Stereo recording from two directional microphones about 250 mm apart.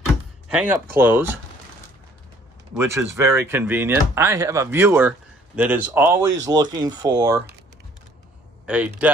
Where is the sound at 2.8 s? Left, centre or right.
Centre.